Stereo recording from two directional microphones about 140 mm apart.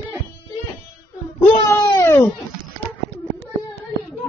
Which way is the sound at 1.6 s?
20° left (ahead or behind).